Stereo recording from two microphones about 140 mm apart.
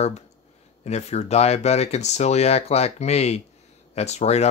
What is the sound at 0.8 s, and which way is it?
Speech, 50° left (ahead or behind).